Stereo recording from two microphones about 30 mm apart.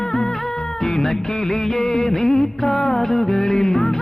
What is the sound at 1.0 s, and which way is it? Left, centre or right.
Music, centre.